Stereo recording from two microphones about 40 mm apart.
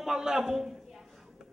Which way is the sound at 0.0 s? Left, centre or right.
Centre.